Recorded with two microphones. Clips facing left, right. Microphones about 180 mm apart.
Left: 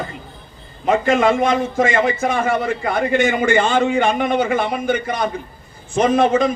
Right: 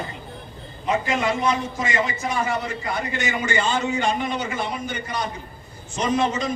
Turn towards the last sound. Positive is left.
turn(degrees=55)  # may be behind; listen again after turning